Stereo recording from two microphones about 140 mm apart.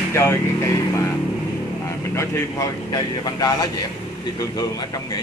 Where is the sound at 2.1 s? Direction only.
20° left (ahead or behind).